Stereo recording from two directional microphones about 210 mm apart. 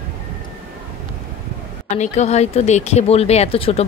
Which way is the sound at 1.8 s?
35° left (ahead or behind).